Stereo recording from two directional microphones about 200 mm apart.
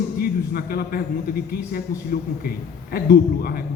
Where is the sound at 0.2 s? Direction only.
50° left (ahead or behind).